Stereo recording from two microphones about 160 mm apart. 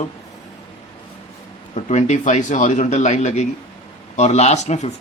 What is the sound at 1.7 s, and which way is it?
Speech, 45° left (ahead or behind).